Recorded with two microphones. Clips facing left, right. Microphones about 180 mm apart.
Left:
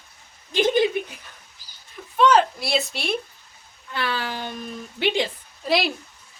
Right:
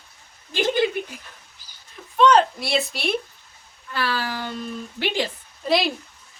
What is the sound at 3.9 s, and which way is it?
Speech, 20° left (ahead or behind).